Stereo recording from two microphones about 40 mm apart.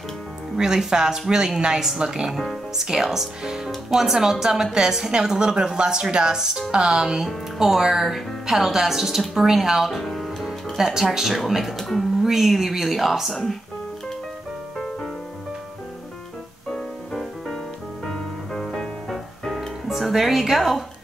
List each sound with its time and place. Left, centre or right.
0.6 s speech: centre
10.8 s speech: centre
16.7 s music: centre
19.9 s speech: centre